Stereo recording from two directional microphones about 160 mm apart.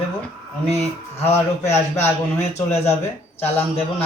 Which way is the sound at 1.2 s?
45° left (ahead or behind).